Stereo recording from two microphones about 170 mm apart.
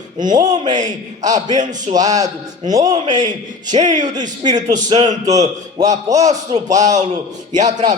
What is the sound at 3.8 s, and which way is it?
Speech, 45° right (ahead or behind).